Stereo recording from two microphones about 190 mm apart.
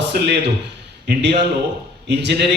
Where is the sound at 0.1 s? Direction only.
60° right (ahead or behind).